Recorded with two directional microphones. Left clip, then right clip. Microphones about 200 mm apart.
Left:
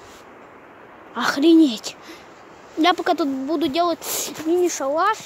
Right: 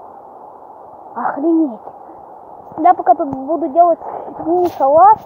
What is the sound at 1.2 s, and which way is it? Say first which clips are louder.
Speech: right 2 dB; 55° left (ahead or behind).